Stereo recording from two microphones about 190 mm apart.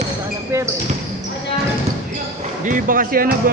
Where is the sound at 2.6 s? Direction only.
45° right (ahead or behind).